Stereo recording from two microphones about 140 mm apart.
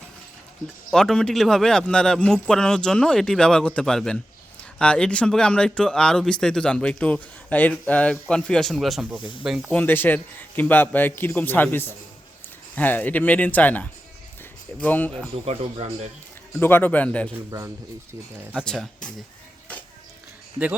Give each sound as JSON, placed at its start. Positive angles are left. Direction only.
{"t": 0.9, "sound": "speech", "side_deg": 5}
{"t": 9.7, "sound": "a man's voice", "side_deg": 15}
{"t": 15.4, "sound": "speech", "side_deg": -45}
{"t": 16.6, "sound": "a man's voice", "side_deg": 15}
{"t": 18.5, "sound": "speech", "side_deg": 5}